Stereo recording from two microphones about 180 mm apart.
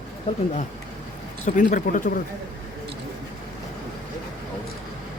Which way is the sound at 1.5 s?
45° left (ahead or behind).